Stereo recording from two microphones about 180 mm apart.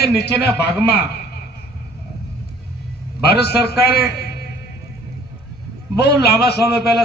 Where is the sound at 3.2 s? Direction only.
65° left (ahead or behind).